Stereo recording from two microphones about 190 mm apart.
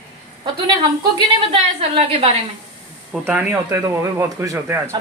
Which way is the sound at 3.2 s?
10° right (ahead or behind).